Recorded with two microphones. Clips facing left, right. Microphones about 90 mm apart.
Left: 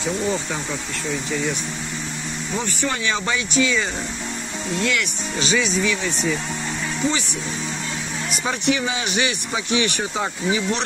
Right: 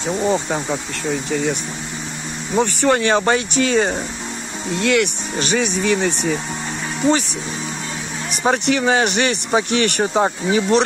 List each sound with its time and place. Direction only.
0.3 s speech: 40° right (ahead or behind)
2.6 s speech: 60° right (ahead or behind)
8.5 s speech: 55° right (ahead or behind)
10.1 s speech: 45° right (ahead or behind)